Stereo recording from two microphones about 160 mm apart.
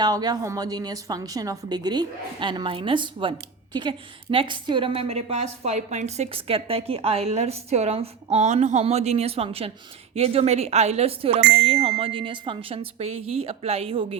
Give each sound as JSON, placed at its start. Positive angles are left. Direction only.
{"t": 0.0, "sound": "a woman's voice", "side_deg": -25}